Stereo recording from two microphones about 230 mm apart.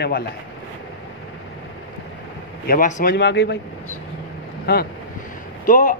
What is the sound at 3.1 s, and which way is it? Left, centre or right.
Speech, left.